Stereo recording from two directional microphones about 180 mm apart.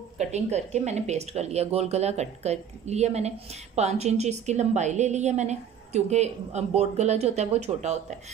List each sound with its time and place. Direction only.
0.3 s speech: 40° right (ahead or behind)